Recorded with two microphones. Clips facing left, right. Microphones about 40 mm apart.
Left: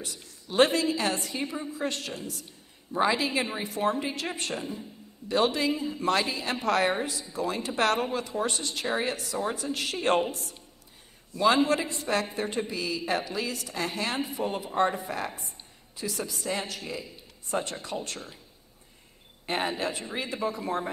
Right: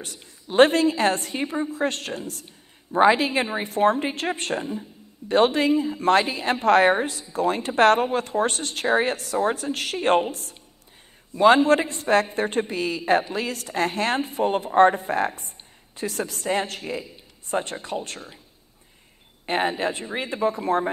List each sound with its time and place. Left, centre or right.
0.2 s a man's voice: right
0.7 s speech: right
1.4 s a woman's voice: right
1.7 s a woman's voice: right
11.3 s a woman's voice: right
17.5 s a woman's voice: right
19.4 s a man's voice: right